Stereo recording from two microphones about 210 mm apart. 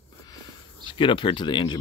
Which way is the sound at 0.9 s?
25° left (ahead or behind).